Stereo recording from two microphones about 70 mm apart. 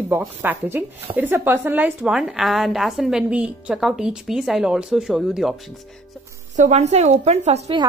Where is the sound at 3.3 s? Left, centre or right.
Centre.